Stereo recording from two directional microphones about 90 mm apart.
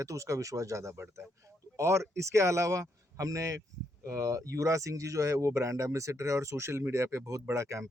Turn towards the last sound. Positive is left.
turn(degrees=-35)  # may be behind; listen again after turning